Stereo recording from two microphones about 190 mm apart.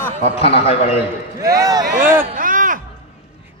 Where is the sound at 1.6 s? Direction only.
20° right (ahead or behind).